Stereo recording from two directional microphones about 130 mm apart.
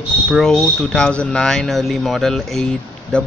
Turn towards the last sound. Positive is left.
turn(degrees=5)  # may be behind; listen again after turning